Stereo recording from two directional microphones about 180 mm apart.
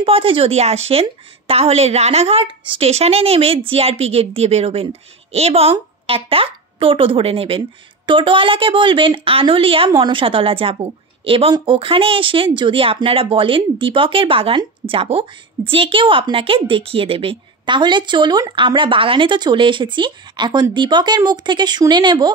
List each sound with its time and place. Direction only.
0.0 s a woman's voice: 30° right (ahead or behind)